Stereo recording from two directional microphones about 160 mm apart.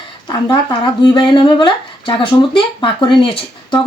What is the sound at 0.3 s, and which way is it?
A woman's voice, 30° left (ahead or behind).